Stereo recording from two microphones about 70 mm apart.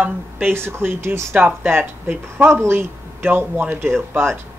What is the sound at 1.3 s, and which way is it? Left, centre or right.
Speech, right.